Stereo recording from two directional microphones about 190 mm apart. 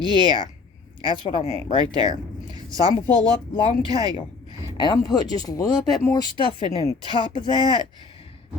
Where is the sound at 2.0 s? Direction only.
20° right (ahead or behind).